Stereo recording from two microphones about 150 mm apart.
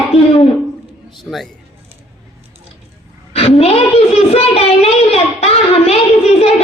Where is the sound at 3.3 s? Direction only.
40° left (ahead or behind).